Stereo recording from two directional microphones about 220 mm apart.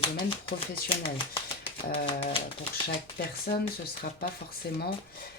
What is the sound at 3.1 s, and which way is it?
Speech, 40° left (ahead or behind).